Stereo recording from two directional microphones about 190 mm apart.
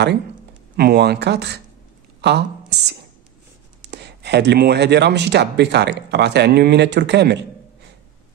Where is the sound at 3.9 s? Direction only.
60° right (ahead or behind).